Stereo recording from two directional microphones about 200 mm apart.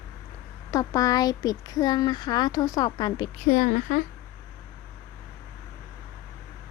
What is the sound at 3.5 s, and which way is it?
Speech, 40° left (ahead or behind).